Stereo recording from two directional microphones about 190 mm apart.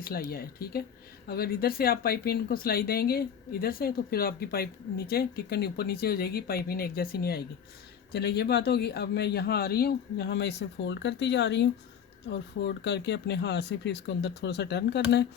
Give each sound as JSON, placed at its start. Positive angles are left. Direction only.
{"t": 0.0, "sound": "a man's voice", "side_deg": 50}